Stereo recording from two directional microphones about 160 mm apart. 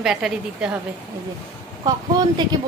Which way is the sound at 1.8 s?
25° right (ahead or behind).